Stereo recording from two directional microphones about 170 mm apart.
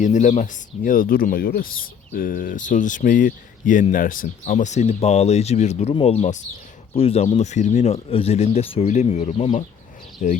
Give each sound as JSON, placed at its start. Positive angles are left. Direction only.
{"t": 0.0, "sound": "speech", "side_deg": 45}